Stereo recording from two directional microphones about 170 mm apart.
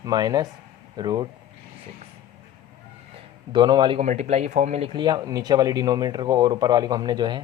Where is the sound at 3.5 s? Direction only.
25° right (ahead or behind).